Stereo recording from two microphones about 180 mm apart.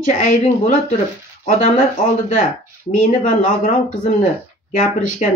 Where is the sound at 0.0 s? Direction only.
45° left (ahead or behind).